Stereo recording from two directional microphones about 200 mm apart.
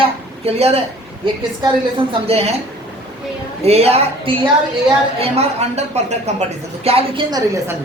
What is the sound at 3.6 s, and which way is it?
A woman's voice, 30° right (ahead or behind).